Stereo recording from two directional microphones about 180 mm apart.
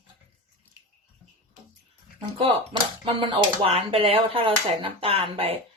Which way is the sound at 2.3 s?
30° right (ahead or behind).